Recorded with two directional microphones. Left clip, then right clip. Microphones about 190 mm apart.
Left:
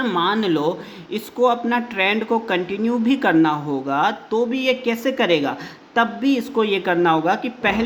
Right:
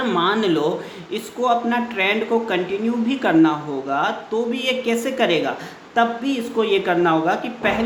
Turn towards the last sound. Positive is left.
turn(degrees=30)  # may be behind; listen again after turning